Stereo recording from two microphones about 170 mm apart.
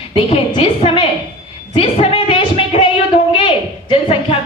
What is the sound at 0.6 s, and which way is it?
A woman's voice, 35° left (ahead or behind).